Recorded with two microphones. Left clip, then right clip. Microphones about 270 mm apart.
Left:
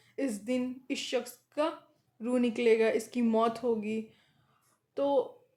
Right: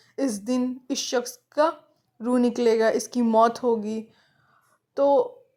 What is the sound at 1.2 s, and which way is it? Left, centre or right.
Speech, centre.